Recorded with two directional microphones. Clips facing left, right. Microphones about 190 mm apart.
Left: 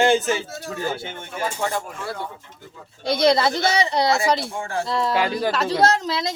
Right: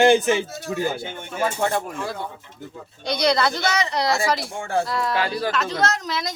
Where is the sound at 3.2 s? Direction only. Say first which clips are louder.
Left 3 dB; 25° left (ahead or behind).